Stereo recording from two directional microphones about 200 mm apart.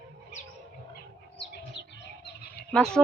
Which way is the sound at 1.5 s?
60° left (ahead or behind).